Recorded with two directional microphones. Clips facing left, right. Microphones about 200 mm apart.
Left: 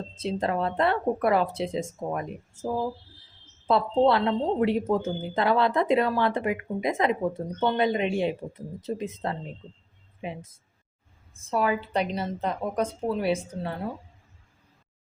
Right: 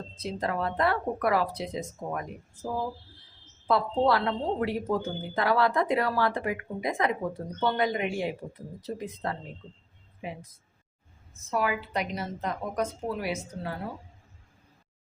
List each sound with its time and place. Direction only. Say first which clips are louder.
0.2 s speech: left 4 dB; 25° left (ahead or behind)